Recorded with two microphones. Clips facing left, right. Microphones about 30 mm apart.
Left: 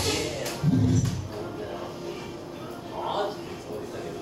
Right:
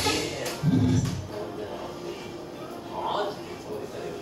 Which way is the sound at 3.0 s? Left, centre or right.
Centre.